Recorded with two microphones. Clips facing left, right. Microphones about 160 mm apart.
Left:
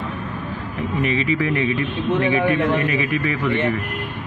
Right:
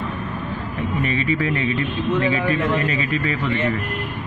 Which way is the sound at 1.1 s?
20° left (ahead or behind).